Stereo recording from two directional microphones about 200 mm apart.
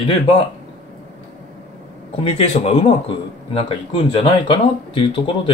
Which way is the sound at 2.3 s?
30° left (ahead or behind).